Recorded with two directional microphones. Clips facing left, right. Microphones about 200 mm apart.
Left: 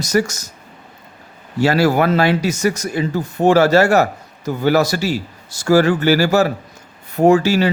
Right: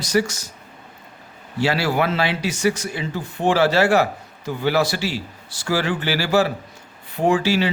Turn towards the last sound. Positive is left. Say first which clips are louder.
# left 6 dB
turn(degrees=45)  # may be behind; listen again after turning